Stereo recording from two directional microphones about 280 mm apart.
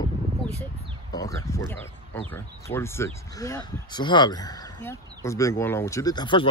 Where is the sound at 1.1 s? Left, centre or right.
Centre.